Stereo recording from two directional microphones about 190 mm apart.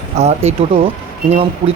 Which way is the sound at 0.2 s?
35° right (ahead or behind).